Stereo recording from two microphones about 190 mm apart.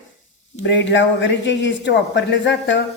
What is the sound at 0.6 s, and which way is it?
Speech, 70° left (ahead or behind).